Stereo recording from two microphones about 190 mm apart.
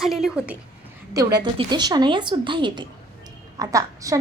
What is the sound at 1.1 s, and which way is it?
A woman's voice, 20° right (ahead or behind).